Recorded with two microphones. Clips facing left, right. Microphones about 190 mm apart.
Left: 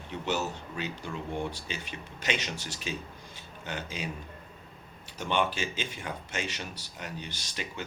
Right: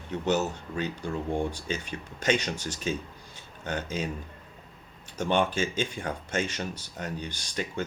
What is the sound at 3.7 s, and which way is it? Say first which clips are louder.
Speech: right 5 dB; 45° right (ahead or behind).